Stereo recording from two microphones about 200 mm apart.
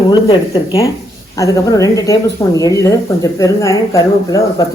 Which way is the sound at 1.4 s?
15° left (ahead or behind).